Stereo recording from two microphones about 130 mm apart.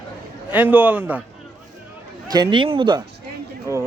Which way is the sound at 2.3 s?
35° right (ahead or behind).